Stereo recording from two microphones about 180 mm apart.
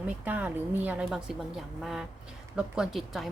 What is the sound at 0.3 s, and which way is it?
A woman's voice, 10° right (ahead or behind).